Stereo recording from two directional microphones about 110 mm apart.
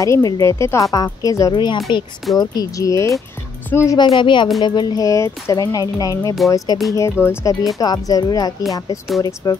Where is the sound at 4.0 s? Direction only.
45° left (ahead or behind).